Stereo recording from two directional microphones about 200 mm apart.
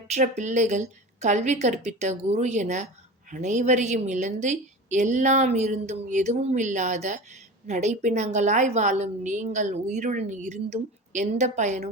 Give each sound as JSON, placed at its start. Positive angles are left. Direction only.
{"t": 0.1, "sound": "a woman's voice", "side_deg": -35}